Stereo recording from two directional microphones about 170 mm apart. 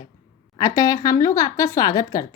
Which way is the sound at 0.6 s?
20° left (ahead or behind).